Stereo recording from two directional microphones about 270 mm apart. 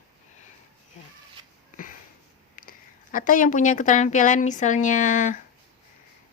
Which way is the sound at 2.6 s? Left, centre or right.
Left.